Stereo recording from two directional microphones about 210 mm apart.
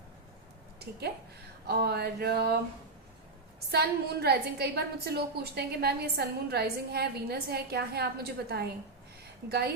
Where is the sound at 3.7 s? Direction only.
50° right (ahead or behind).